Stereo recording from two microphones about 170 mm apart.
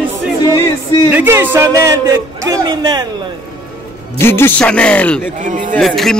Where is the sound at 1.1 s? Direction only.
10° right (ahead or behind).